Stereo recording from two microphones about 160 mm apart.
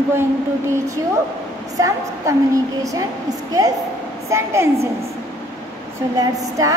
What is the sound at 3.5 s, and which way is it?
A woman's voice, 25° right (ahead or behind).